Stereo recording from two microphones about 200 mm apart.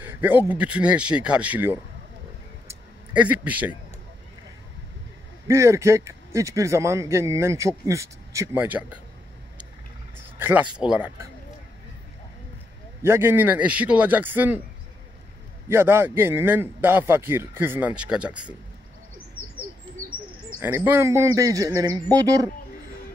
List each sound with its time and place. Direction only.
0.0 s a man's voice: 10° right (ahead or behind)
2.7 s a sound: 5° right (ahead or behind)
5.5 s a man's voice: 15° right (ahead or behind)
10.4 s a man's voice: 5° right (ahead or behind)
13.0 s a man's voice: 10° right (ahead or behind)
15.7 s a man's voice: 10° right (ahead or behind)
20.6 s a man's voice: 10° right (ahead or behind)